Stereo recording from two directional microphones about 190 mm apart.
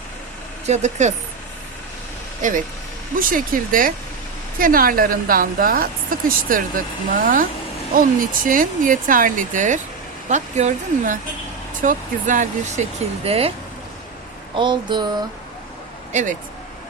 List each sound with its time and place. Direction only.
0.6 s speech: 35° right (ahead or behind)
2.4 s a woman's voice: 40° right (ahead or behind)
14.5 s a sound: 25° right (ahead or behind)
16.1 s a woman's voice: 40° right (ahead or behind)